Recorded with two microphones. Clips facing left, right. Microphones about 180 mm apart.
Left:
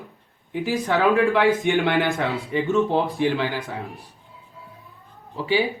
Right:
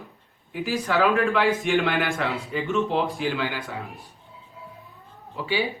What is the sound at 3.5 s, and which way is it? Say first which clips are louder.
Speech: left 3 dB; 40° left (ahead or behind).